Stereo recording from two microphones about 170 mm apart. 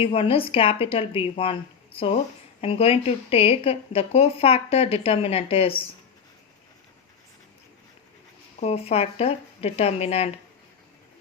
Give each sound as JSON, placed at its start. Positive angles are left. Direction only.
{"t": 0.0, "sound": "speech", "side_deg": 35}
{"t": 2.6, "sound": "speech", "side_deg": 35}
{"t": 8.6, "sound": "speech", "side_deg": 35}